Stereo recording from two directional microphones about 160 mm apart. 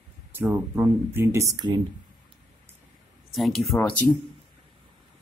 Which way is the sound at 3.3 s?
Centre (ahead or behind).